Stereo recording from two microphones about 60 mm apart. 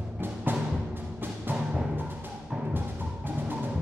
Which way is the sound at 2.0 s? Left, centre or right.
Right.